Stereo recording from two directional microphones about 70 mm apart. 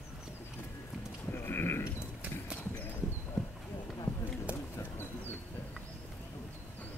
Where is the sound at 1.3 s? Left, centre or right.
Left.